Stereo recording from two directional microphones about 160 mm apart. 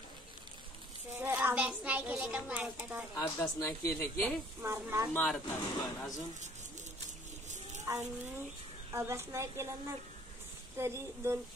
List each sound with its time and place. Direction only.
1.1 s a child's voice: 15° right (ahead or behind)
3.2 s speech: 20° left (ahead or behind)
4.0 s speech: 5° left (ahead or behind)
4.6 s a child's voice: 15° right (ahead or behind)
5.1 s speech: 10° left (ahead or behind)
7.8 s a sound: 15° right (ahead or behind)
8.9 s a child's voice: 15° right (ahead or behind)